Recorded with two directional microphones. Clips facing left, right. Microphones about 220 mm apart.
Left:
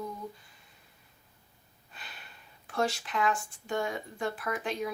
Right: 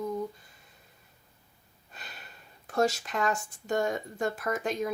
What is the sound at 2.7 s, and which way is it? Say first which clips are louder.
Speech: right 4 dB; 40° right (ahead or behind).